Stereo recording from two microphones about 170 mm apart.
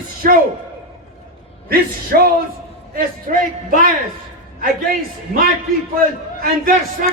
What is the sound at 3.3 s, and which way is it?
Speech, 55° right (ahead or behind).